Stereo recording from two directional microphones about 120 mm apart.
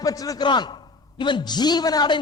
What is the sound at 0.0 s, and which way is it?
A man's voice, 30° left (ahead or behind).